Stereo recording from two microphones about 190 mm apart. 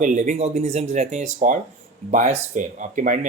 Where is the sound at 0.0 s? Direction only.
40° right (ahead or behind).